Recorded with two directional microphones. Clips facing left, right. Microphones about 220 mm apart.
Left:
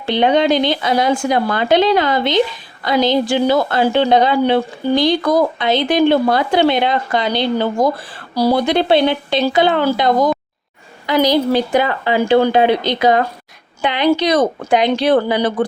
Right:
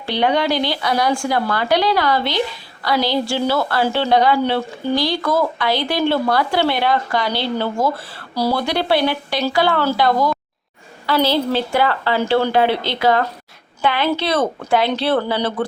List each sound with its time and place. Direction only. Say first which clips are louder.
0.0 s a woman's voice: left 4 dB; 20° left (ahead or behind)